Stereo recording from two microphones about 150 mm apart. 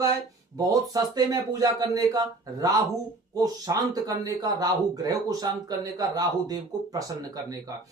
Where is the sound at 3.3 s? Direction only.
25° right (ahead or behind).